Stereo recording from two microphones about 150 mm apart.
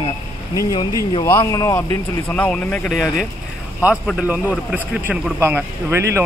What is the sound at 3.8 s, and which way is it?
Speech, 5° right (ahead or behind).